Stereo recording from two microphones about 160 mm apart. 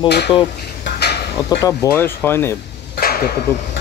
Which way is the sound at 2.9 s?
70° left (ahead or behind).